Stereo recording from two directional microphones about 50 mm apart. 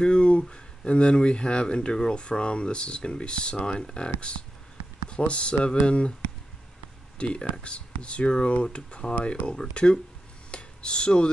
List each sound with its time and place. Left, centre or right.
0.0 s speech: centre
7.2 s speech: left
10.5 s a sound: centre